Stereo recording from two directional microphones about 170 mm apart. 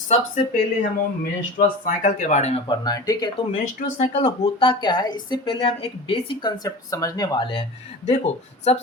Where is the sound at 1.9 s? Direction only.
50° left (ahead or behind).